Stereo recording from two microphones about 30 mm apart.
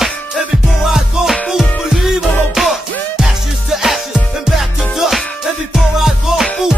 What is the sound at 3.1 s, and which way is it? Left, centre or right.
Music, centre.